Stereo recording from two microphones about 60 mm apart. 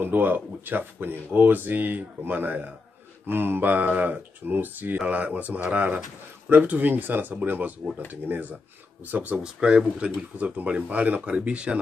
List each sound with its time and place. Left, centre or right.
0.0 s speech: right
9.4 s speech: centre